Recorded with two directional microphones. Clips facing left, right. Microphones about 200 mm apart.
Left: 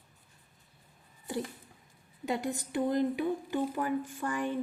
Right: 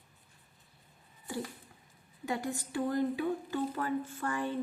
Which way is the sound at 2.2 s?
20° left (ahead or behind).